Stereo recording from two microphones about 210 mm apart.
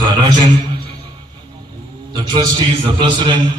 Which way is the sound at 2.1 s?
20° right (ahead or behind).